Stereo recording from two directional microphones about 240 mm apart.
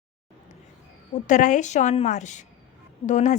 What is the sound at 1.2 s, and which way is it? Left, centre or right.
A woman's voice, left.